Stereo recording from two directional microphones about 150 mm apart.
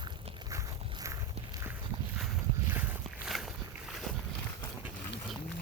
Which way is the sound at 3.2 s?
Centre (ahead or behind).